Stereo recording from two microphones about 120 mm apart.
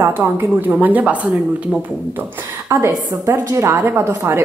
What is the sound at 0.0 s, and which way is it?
A woman's voice, 20° right (ahead or behind).